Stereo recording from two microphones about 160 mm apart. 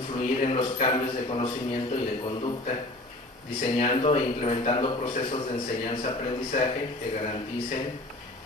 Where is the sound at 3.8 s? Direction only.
35° left (ahead or behind).